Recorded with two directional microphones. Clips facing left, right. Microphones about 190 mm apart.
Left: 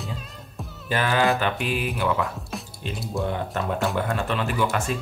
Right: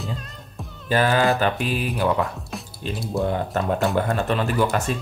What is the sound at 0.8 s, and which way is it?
Speech, 35° right (ahead or behind).